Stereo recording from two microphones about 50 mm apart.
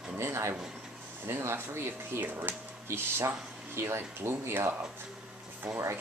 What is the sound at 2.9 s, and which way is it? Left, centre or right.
Speech, right.